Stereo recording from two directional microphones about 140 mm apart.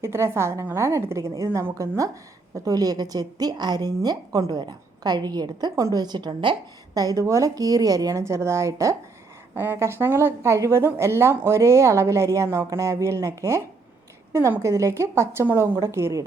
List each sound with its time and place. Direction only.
0.0 s a woman's voice: 20° right (ahead or behind)